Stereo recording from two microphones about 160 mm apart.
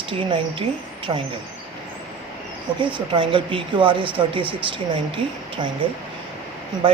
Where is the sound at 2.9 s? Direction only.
30° right (ahead or behind).